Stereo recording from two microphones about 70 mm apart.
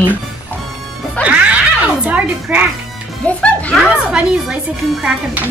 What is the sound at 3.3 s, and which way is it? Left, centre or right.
Speech, centre.